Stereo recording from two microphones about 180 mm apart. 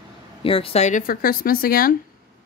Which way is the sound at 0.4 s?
30° left (ahead or behind).